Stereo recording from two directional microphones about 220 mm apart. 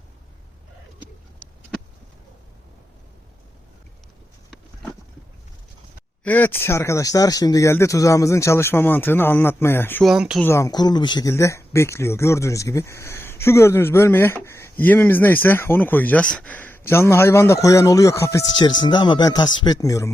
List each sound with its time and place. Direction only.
6.2 s speech: 10° left (ahead or behind)
10.1 s speech: centre (ahead or behind)
10.4 s speech: 15° left (ahead or behind)